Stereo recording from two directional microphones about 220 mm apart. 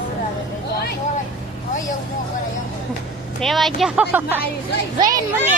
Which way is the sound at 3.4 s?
Centre (ahead or behind).